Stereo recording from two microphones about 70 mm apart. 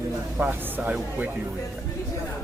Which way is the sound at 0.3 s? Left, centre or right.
Right.